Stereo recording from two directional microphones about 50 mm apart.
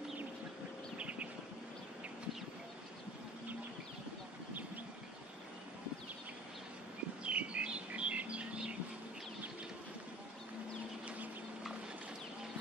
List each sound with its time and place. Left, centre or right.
0.9 s bird: right
7.2 s bird: right